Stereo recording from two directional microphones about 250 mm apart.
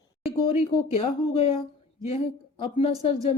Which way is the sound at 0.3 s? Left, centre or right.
Left.